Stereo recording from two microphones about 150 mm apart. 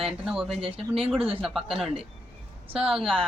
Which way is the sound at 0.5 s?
40° right (ahead or behind).